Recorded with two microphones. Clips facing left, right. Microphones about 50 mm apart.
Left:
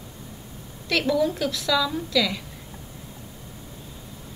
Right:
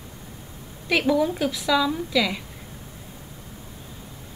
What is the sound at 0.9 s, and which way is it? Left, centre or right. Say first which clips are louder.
A woman's voice: right 1 dB; centre.